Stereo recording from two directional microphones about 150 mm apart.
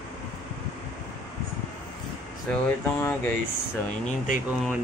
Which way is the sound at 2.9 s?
20° left (ahead or behind).